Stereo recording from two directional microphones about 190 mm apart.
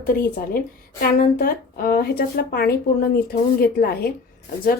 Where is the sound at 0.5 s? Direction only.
50° left (ahead or behind).